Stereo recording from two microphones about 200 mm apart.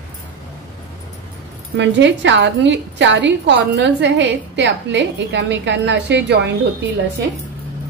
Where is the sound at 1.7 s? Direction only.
65° right (ahead or behind).